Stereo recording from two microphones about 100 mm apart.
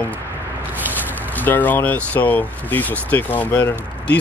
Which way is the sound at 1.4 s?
15° left (ahead or behind).